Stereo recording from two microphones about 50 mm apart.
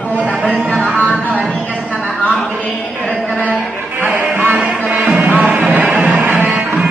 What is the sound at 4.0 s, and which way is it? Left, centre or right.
Music, right.